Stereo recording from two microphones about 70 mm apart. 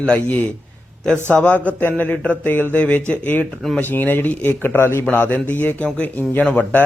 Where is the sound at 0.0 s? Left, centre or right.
Centre; by 5.0 s left.